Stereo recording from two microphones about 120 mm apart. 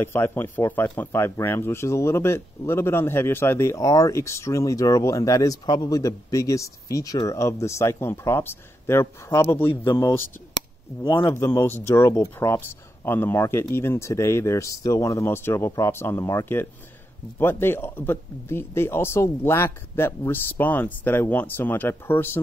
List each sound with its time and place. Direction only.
0.0 s speech: 20° left (ahead or behind)
11.2 s speech: 20° left (ahead or behind)